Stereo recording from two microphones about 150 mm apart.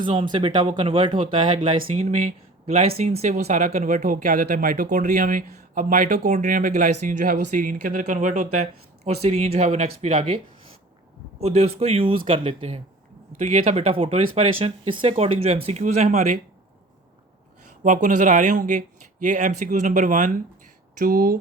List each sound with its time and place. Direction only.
0.0 s speech: 35° right (ahead or behind)
1.9 s speech: 50° right (ahead or behind)
17.8 s speech: 60° right (ahead or behind)
21.0 s speech: 70° right (ahead or behind)